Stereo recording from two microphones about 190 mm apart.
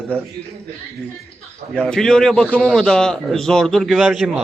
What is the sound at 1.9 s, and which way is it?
A man's voice, 5° left (ahead or behind).